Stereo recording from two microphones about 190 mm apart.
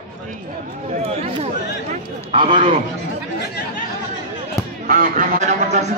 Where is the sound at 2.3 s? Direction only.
25° right (ahead or behind).